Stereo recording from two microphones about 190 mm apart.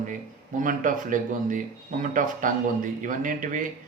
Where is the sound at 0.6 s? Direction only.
45° right (ahead or behind).